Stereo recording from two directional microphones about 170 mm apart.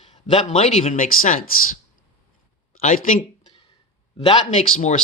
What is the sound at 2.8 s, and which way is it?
Speech, 50° left (ahead or behind).